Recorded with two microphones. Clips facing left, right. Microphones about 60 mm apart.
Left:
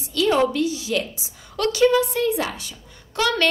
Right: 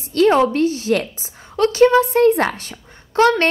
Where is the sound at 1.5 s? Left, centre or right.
Right.